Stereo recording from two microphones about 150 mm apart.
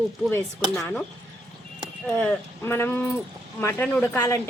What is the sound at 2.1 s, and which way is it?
Speech, 10° left (ahead or behind).